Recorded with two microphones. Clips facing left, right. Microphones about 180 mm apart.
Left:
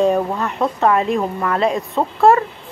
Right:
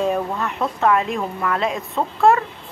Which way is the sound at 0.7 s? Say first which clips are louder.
Left 1 dB; 35° left (ahead or behind).